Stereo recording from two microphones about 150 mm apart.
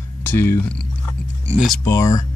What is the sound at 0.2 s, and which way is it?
Speech, 15° left (ahead or behind).